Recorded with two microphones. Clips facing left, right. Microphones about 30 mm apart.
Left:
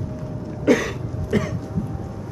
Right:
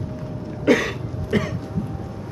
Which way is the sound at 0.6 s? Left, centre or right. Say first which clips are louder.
Even; right.